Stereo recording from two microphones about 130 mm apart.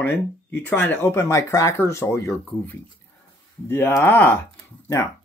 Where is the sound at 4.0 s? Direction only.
15° left (ahead or behind).